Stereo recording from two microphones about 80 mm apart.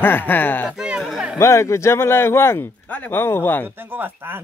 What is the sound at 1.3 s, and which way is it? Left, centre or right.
Speech, left.